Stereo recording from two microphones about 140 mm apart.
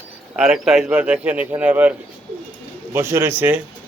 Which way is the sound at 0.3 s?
5° right (ahead or behind).